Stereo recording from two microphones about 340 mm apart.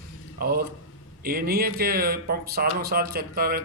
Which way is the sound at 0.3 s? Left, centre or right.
Right.